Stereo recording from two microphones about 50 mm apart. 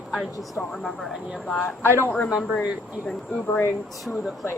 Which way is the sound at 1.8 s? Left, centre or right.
Left.